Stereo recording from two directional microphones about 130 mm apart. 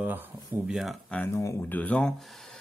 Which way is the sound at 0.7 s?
Centre (ahead or behind).